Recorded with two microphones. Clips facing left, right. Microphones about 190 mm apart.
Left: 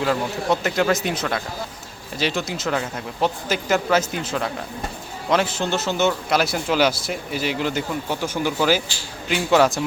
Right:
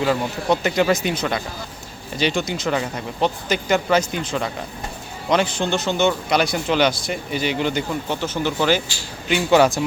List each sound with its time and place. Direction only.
0.0 s a man's voice: centre (ahead or behind)